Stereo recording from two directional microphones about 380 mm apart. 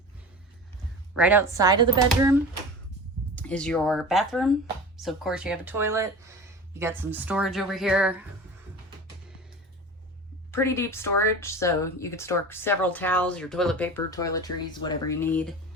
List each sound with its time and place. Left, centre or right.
1.1 s speech: centre
3.3 s speech: centre
10.5 s speech: centre